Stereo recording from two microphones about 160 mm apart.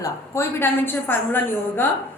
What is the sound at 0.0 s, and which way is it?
Speech, 15° left (ahead or behind).